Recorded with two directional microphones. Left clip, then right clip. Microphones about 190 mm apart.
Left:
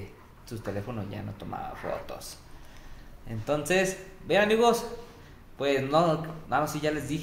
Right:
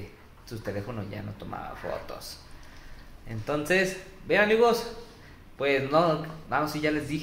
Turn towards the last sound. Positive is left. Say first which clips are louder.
# right 2 dB
turn(degrees=-10)  # may be behind; listen again after turning